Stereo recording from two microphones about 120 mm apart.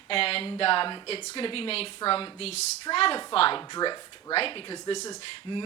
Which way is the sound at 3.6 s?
35° left (ahead or behind).